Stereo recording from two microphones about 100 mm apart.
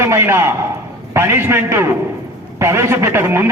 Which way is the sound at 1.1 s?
25° right (ahead or behind).